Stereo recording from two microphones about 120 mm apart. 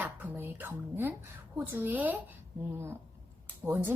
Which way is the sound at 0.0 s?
15° right (ahead or behind).